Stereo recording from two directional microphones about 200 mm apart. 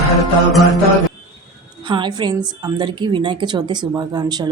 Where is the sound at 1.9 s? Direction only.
20° right (ahead or behind).